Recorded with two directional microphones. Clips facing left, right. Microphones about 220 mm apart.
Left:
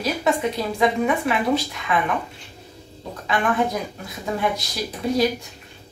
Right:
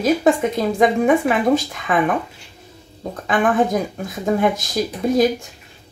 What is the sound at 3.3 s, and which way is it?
A woman's voice, 50° right (ahead or behind).